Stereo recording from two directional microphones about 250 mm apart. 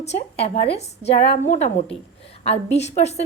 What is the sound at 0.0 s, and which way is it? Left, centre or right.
A woman's voice, left.